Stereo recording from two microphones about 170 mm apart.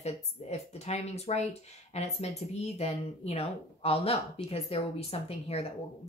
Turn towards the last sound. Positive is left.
turn(degrees=35)  # may be behind; listen again after turning